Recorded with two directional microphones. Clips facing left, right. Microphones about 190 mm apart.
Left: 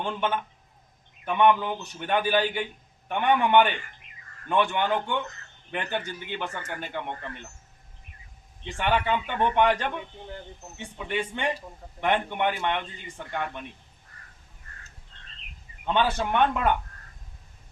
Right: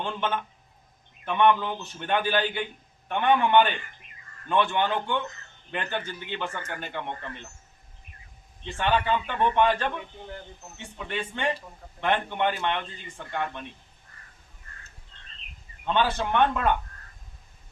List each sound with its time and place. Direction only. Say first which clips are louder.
0.0 s a man's voice: left 1 dB; 10° left (ahead or behind)
8.6 s a man's voice: even; 15° left (ahead or behind)
15.9 s a man's voice: even; 15° left (ahead or behind)